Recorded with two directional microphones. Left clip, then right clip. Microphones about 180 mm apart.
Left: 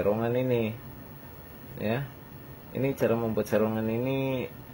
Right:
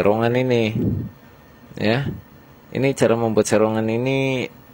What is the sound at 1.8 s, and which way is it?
Mantra, 35° right (ahead or behind).